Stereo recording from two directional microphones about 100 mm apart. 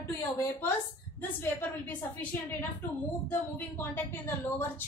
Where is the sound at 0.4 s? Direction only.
20° left (ahead or behind).